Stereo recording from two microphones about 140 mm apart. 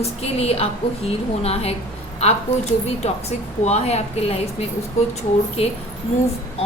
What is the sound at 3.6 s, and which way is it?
Speech, 50° left (ahead or behind).